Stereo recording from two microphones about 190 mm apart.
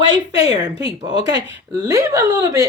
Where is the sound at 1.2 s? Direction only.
65° right (ahead or behind).